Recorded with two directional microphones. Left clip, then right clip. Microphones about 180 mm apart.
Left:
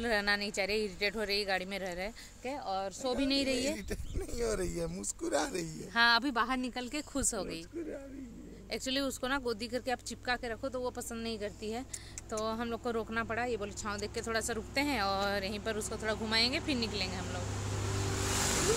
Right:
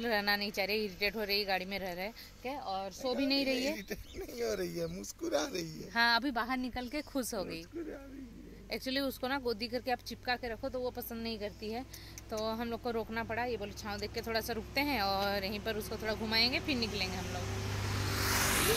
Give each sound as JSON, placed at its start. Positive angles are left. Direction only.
{"t": 0.0, "sound": "a woman's voice", "side_deg": -5}
{"t": 3.7, "sound": "speech", "side_deg": 20}
{"t": 5.9, "sound": "speech", "side_deg": -5}
{"t": 8.6, "sound": "a woman's voice", "side_deg": -5}